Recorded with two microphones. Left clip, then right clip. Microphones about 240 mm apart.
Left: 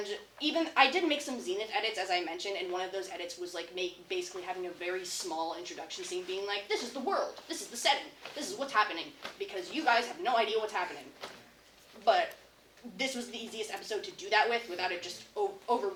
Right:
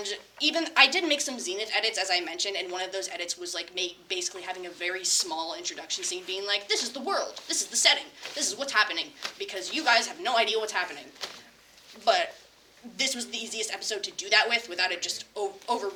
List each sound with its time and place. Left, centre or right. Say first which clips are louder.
0.0 s a woman's voice: right 6 dB; right
12.1 s a woman's voice: right 3 dB; right